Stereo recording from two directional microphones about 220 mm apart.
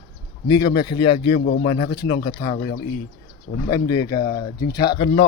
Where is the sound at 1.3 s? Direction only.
50° left (ahead or behind).